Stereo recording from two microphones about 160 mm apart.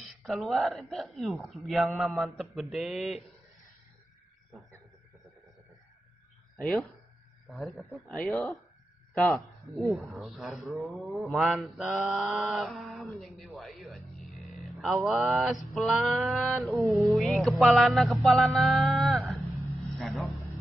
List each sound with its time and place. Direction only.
0.0 s a man's voice: centre (ahead or behind)
6.6 s a man's voice: centre (ahead or behind)
16.7 s music: 20° right (ahead or behind)
17.1 s a man's voice: centre (ahead or behind)